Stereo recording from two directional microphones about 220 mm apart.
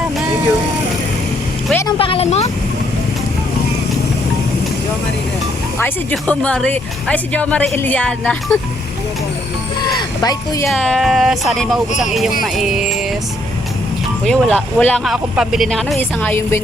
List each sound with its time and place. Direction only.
1.7 s speech: 15° left (ahead or behind)
2.0 s speech: 25° left (ahead or behind)
5.8 s speech: 5° left (ahead or behind)
9.8 s a sound: 15° left (ahead or behind)
10.7 s speech: centre (ahead or behind)
14.3 s speech: 5° left (ahead or behind)